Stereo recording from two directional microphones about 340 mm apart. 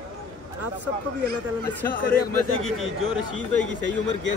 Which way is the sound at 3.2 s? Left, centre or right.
Left.